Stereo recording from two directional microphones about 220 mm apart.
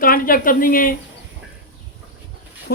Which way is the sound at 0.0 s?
40° left (ahead or behind).